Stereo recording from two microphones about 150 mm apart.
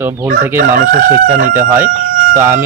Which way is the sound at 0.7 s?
60° right (ahead or behind).